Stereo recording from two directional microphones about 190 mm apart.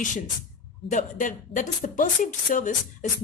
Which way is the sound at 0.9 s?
40° left (ahead or behind).